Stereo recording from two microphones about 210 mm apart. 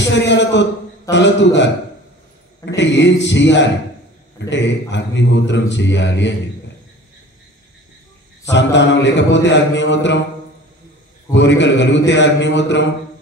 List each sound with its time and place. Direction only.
0.0 s a man's voice: 55° left (ahead or behind)
8.5 s a man's voice: 55° left (ahead or behind)
11.3 s a man's voice: 55° left (ahead or behind)